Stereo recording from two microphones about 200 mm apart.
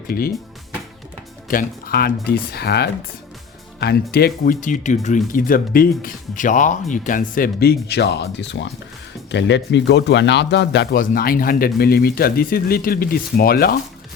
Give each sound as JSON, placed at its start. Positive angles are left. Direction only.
{"t": 0.1, "sound": "speech", "side_deg": 50}
{"t": 1.5, "sound": "a man's voice", "side_deg": 45}
{"t": 11.0, "sound": "speech", "side_deg": 45}